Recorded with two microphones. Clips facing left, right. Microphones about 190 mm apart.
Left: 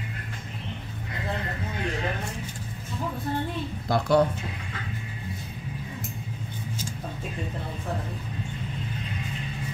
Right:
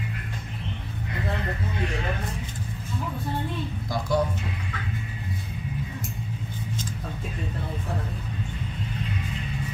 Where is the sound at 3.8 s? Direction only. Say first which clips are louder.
Left 5 dB; 60° left (ahead or behind).